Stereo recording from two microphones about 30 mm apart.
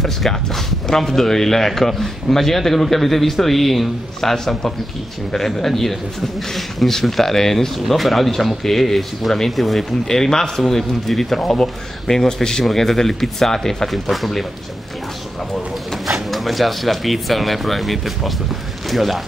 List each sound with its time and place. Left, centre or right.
0.0 s a man's voice: centre
10.5 s a man's voice: centre
12.6 s a man's voice: centre
13.8 s speech: centre
16.3 s speech: centre